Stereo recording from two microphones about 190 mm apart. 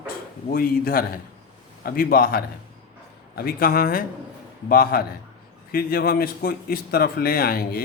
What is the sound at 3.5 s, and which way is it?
A man's voice, 50° left (ahead or behind).